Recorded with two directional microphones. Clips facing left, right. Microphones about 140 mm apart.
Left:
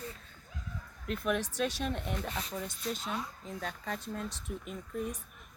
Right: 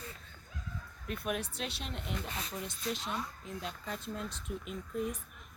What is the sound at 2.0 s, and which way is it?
Speech, 45° left (ahead or behind).